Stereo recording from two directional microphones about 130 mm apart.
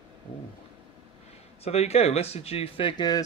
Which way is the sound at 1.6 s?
55° left (ahead or behind).